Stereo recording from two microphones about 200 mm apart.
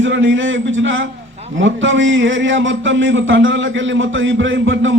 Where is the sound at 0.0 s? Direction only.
75° right (ahead or behind).